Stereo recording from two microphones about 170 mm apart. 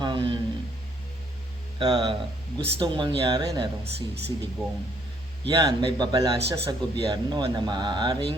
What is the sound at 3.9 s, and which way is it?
Speech, 75° right (ahead or behind).